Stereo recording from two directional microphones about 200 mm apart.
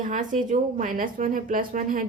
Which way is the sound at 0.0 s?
40° right (ahead or behind).